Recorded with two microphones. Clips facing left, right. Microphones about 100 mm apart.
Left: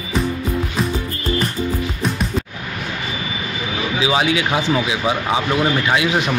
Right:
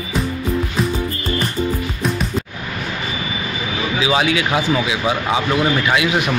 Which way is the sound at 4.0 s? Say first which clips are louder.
Even; 25° left (ahead or behind).